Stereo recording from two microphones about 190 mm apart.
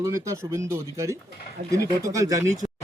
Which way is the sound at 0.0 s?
15° right (ahead or behind).